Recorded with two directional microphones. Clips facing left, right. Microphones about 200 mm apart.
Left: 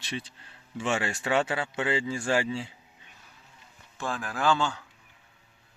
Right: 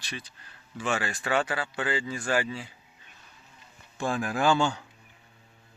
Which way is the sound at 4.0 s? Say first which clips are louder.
Right 4 dB; 15° right (ahead or behind).